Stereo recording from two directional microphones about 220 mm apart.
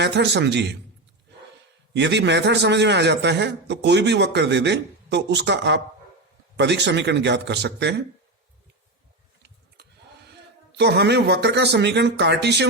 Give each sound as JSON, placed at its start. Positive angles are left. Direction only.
{"t": 0.0, "sound": "a man's voice", "side_deg": -50}
{"t": 1.9, "sound": "a man's voice", "side_deg": -50}
{"t": 10.8, "sound": "a man's voice", "side_deg": -50}